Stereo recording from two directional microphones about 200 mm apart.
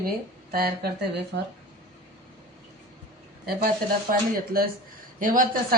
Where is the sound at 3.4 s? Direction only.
50° right (ahead or behind).